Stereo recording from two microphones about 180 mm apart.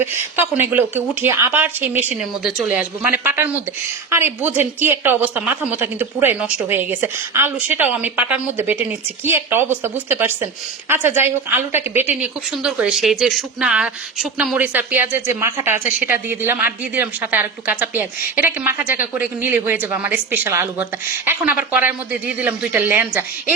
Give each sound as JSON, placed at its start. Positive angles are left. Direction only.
{"t": 0.0, "sound": "a woman's voice", "side_deg": -10}